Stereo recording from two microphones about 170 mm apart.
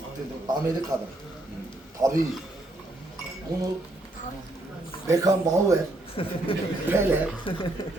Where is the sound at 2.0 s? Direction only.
20° right (ahead or behind).